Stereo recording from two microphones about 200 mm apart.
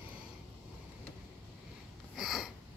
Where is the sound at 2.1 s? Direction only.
Centre (ahead or behind).